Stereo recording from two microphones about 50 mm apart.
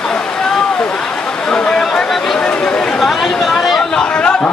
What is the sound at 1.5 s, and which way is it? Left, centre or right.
Chatter, centre.